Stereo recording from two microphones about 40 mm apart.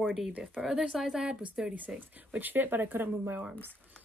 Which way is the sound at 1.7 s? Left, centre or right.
Right.